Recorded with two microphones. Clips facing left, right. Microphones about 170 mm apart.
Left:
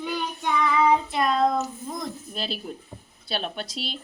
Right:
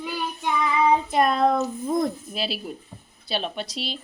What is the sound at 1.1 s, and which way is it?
Child singing, 50° right (ahead or behind).